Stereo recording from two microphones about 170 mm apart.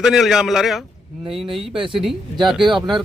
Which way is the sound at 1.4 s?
30° right (ahead or behind).